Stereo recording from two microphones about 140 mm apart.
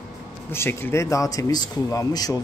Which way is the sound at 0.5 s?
15° left (ahead or behind).